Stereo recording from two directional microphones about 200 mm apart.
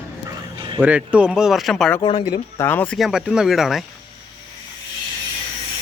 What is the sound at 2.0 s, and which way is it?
Speech, 25° left (ahead or behind).